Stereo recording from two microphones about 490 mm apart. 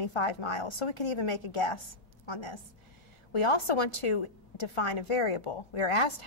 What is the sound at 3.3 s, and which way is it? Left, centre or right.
A woman's voice, left.